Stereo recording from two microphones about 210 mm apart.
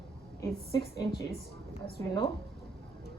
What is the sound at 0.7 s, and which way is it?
Speech, 20° left (ahead or behind).